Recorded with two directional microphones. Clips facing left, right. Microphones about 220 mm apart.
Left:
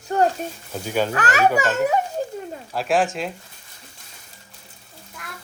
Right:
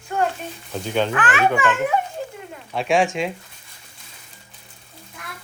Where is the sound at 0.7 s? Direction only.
5° left (ahead or behind).